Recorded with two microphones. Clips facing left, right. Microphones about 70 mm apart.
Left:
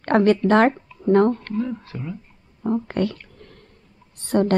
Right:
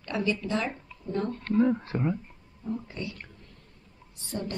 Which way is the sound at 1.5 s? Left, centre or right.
Right.